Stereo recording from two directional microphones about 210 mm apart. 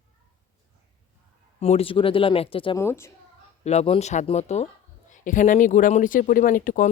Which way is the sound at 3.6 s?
30° left (ahead or behind).